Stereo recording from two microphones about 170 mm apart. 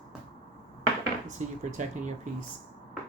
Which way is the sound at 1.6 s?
45° right (ahead or behind).